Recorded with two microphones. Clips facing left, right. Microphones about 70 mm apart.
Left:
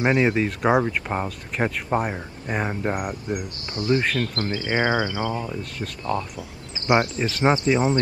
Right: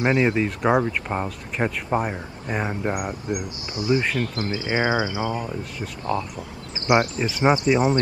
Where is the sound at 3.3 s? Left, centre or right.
Centre.